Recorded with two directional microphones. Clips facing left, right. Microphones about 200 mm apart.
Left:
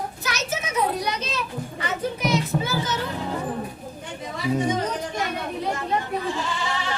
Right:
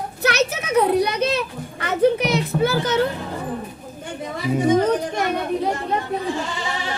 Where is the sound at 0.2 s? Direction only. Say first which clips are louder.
Right 12 dB; 65° right (ahead or behind).